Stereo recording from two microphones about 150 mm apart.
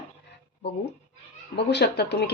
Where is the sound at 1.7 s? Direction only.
90° left.